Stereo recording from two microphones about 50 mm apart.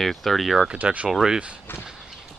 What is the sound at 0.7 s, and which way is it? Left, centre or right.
Speech, right.